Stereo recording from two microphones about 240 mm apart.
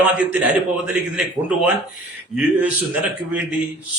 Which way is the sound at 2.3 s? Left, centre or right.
Centre.